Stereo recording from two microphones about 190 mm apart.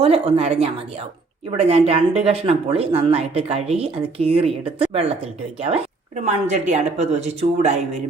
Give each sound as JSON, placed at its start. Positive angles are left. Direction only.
{"t": 0.0, "sound": "speech", "side_deg": -30}